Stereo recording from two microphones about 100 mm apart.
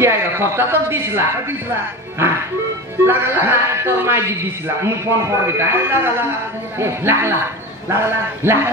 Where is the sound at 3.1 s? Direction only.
25° right (ahead or behind).